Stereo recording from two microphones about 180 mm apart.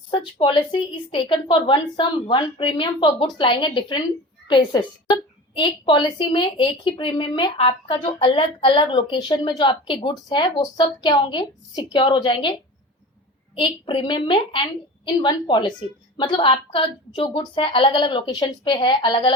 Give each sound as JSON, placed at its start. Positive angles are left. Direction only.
{"t": 0.1, "sound": "a woman's voice", "side_deg": 25}
{"t": 13.6, "sound": "a woman's voice", "side_deg": 25}